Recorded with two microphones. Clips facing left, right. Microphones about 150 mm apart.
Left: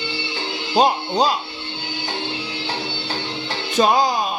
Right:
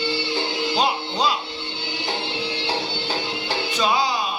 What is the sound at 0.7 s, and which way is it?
Music, 45° left (ahead or behind).